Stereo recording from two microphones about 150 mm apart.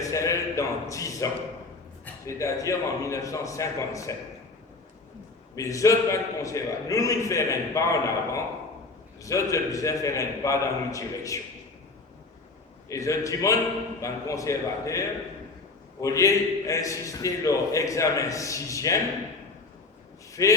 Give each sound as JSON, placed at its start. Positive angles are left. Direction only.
{"t": 0.0, "sound": "a man's voice", "side_deg": 20}
{"t": 5.5, "sound": "a man's voice", "side_deg": 20}
{"t": 12.9, "sound": "a man's voice", "side_deg": 20}
{"t": 20.4, "sound": "a man's voice", "side_deg": 25}